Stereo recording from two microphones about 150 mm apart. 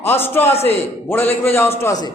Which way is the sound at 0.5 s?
45° left (ahead or behind).